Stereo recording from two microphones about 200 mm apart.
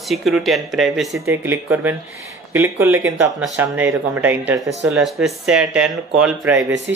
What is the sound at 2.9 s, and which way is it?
Speech, 75° right (ahead or behind).